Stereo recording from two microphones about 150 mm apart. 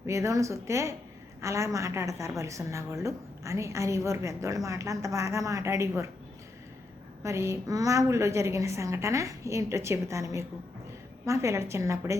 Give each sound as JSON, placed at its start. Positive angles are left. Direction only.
{"t": 0.0, "sound": "a woman's voice", "side_deg": -20}
{"t": 7.2, "sound": "a woman's voice", "side_deg": -20}